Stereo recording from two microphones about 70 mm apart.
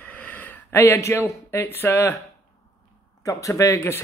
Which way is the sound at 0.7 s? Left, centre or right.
Left.